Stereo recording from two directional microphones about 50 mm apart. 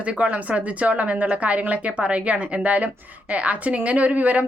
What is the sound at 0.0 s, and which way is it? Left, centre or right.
Speech, right.